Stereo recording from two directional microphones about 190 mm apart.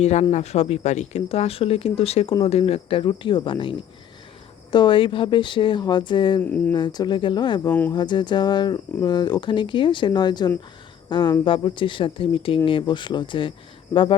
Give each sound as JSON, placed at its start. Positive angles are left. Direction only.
{"t": 0.0, "sound": "speech", "side_deg": 35}
{"t": 6.4, "sound": "speech", "side_deg": 10}
{"t": 6.7, "sound": "speech", "side_deg": 20}
{"t": 7.7, "sound": "speech", "side_deg": 10}
{"t": 7.9, "sound": "speech", "side_deg": 25}